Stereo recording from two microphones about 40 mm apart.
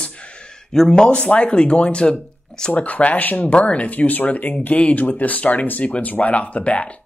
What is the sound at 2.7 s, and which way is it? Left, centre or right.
Speech, left.